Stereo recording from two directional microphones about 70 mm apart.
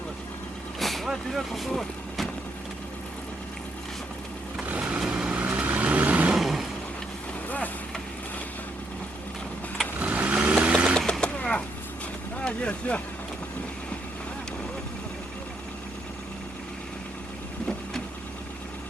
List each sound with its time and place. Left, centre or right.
0.8 s vehicle: centre
4.8 s vehicle: centre
6.3 s vehicle: centre
10.0 s vehicle: centre
10.9 s sewing machine: centre
12.4 s vehicle: centre